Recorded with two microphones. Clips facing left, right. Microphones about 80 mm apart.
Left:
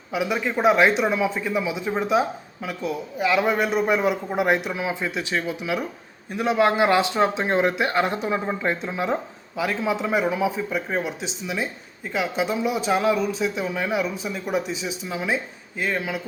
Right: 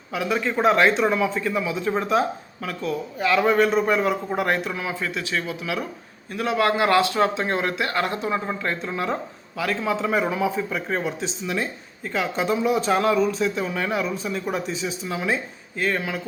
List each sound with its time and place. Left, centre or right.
0.1 s a man's voice: centre